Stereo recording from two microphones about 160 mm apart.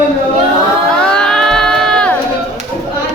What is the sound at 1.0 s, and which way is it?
Crowd, 5° left (ahead or behind).